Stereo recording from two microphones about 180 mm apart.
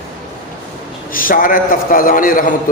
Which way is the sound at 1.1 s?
50° left (ahead or behind).